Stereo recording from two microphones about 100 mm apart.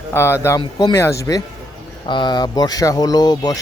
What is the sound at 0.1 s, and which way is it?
Speech, 25° left (ahead or behind).